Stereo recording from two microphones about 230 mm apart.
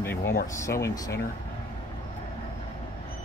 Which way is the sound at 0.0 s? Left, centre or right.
Centre.